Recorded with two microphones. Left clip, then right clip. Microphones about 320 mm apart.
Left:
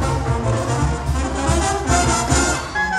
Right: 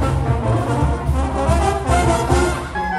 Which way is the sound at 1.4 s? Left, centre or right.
Right.